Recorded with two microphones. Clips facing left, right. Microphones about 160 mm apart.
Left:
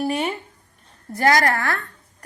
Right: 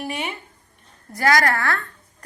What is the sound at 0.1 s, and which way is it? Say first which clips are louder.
Speech: left 5 dB; 40° left (ahead or behind).